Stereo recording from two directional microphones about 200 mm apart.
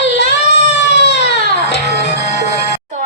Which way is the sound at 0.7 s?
60° left (ahead or behind).